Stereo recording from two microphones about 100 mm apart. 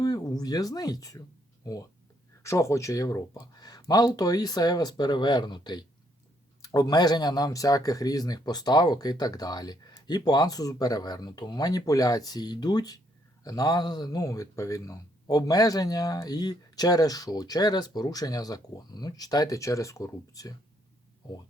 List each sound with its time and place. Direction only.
0.0 s speech: 40° left (ahead or behind)